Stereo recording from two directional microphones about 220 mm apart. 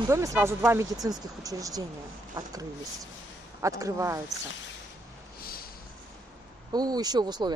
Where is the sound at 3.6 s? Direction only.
15° right (ahead or behind).